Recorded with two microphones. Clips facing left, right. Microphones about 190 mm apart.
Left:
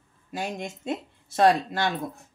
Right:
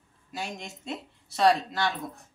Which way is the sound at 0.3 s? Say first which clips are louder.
Left 5 dB; 50° left (ahead or behind).